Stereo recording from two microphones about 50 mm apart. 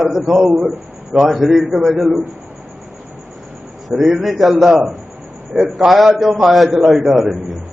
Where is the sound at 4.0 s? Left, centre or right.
Centre.